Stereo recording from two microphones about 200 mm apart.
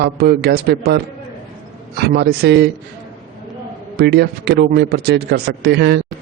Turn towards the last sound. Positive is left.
turn(degrees=-60)  # may be behind; listen again after turning